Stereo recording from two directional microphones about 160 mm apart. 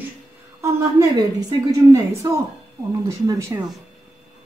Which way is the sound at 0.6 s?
20° right (ahead or behind).